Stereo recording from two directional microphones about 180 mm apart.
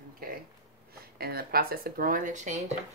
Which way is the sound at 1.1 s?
55° right (ahead or behind).